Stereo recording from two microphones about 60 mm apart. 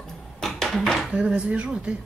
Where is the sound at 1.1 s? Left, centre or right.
Centre.